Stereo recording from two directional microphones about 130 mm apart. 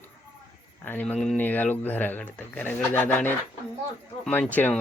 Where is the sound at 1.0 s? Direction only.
5° left (ahead or behind).